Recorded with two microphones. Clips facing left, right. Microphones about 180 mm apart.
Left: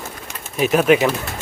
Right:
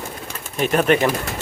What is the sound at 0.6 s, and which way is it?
Speech, 5° left (ahead or behind).